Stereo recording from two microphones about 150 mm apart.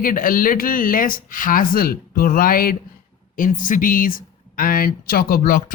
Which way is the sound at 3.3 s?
65° left (ahead or behind).